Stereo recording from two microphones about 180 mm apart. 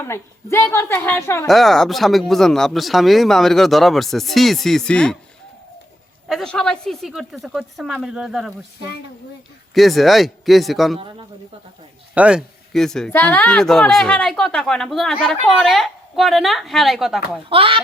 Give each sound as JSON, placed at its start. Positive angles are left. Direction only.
{"t": 0.0, "sound": "a woman's voice", "side_deg": 15}
{"t": 1.5, "sound": "speech", "side_deg": 0}
{"t": 6.2, "sound": "speech", "side_deg": 0}
{"t": 9.7, "sound": "speech", "side_deg": 0}
{"t": 12.1, "sound": "speech", "side_deg": -5}
{"t": 17.5, "sound": "speech", "side_deg": -30}